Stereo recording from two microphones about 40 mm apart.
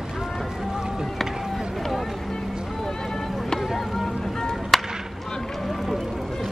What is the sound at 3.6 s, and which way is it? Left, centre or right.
Vehicle, centre.